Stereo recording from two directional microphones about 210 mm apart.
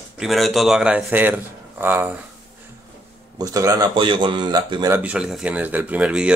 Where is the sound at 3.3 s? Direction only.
15° right (ahead or behind).